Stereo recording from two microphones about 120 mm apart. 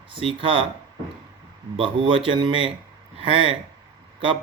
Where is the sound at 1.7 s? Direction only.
45° right (ahead or behind).